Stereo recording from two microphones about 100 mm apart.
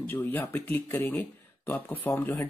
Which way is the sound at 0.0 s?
20° left (ahead or behind).